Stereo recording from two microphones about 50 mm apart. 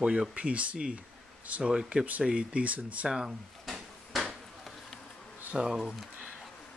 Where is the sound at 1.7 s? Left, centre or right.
Centre; by 3.1 s right.